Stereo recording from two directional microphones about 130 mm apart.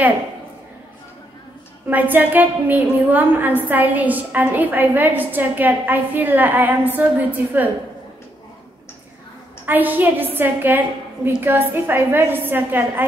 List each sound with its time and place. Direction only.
1.9 s a woman's voice: 15° right (ahead or behind)
9.7 s a woman's voice: 15° right (ahead or behind)